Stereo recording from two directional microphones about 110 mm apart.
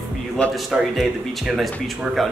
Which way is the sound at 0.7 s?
10° right (ahead or behind).